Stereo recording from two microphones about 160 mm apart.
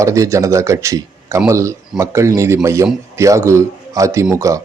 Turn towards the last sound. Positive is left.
turn(degrees=-20)  # may be behind; listen again after turning